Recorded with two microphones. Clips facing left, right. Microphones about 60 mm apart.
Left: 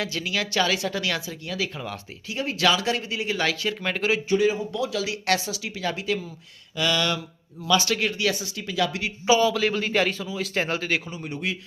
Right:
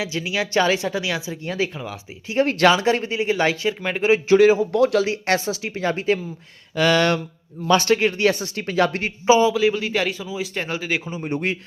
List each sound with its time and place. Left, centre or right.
0.0 s speech: centre
0.9 s speech: centre
1.5 s speech: right
2.4 s speech: right
2.6 s speech: right; by 4.1 s centre
4.3 s speech: right
4.7 s speech: right
5.0 s speech: right
9.2 s speech: right
9.6 s a man's voice: centre
10.5 s a man's voice: centre
10.8 s speech: centre
11.3 s speech: right